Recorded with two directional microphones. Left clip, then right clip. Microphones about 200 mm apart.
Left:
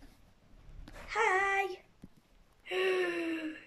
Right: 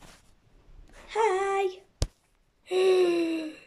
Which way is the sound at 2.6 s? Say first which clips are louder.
Right 9 dB; 20° right (ahead or behind).